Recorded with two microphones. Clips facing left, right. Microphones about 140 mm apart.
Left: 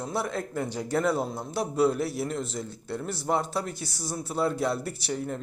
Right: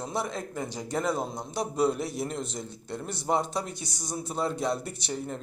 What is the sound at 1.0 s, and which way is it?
A man's voice, 5° left (ahead or behind).